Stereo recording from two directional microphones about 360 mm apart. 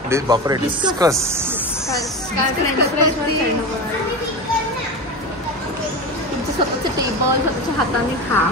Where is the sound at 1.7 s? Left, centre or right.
Centre.